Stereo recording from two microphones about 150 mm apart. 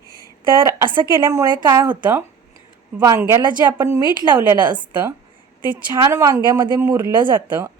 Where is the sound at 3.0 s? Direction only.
20° right (ahead or behind).